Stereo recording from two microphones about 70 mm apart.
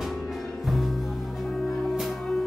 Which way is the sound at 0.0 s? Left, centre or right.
Centre.